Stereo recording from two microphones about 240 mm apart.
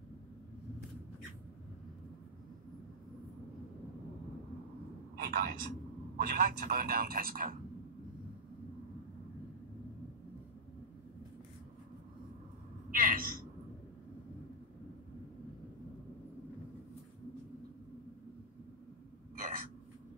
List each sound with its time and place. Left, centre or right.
5.1 s a man's voice: right
12.9 s a sound: right
19.3 s hiccup: right